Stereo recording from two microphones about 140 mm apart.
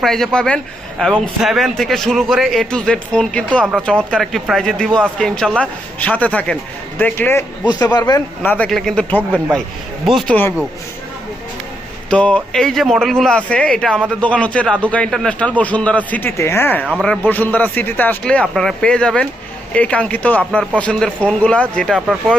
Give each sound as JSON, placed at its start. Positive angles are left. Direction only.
{"t": 0.0, "sound": "a man's voice", "side_deg": 0}
{"t": 7.9, "sound": "speech", "side_deg": 30}
{"t": 8.4, "sound": "a man's voice", "side_deg": 10}
{"t": 12.1, "sound": "a man's voice", "side_deg": 10}
{"t": 21.9, "sound": "speech", "side_deg": -5}